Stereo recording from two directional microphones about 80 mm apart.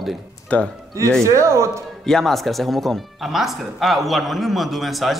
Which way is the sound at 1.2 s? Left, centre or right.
Right.